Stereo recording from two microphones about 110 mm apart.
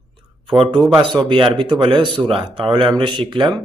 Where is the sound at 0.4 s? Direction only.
45° right (ahead or behind).